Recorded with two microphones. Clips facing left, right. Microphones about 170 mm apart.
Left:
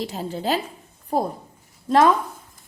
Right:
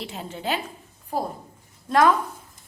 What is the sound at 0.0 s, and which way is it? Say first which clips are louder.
Speech: left 5 dB; 40° left (ahead or behind).